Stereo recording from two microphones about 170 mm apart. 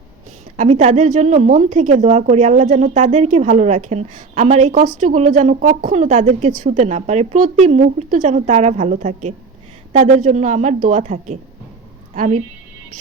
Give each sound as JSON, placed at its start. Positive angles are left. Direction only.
{"t": 0.5, "sound": "a woman's voice", "side_deg": -45}